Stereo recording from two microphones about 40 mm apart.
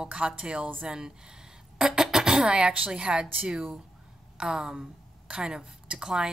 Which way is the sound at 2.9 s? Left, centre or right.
Right.